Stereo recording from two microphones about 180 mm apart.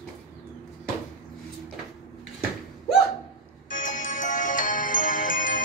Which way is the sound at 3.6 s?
45° left (ahead or behind).